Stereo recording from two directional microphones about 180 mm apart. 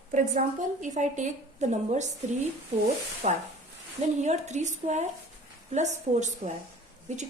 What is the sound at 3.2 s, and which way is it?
A woman's voice, 40° right (ahead or behind).